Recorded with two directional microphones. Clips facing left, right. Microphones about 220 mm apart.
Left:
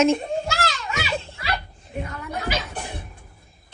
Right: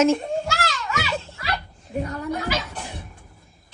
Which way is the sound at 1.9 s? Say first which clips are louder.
Right 5 dB; 35° right (ahead or behind).